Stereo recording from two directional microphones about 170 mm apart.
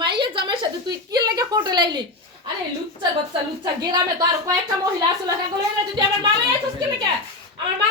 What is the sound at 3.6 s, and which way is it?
Speech, 25° right (ahead or behind).